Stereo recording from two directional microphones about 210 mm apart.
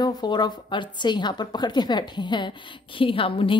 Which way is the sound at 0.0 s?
20° left (ahead or behind).